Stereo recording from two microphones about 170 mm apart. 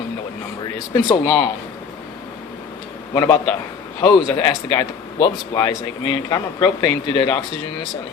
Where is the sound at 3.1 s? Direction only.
20° left (ahead or behind).